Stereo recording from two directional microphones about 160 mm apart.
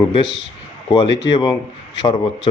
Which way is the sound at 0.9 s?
25° left (ahead or behind).